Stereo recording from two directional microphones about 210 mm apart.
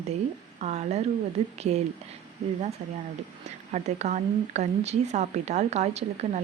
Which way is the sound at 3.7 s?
35° right (ahead or behind).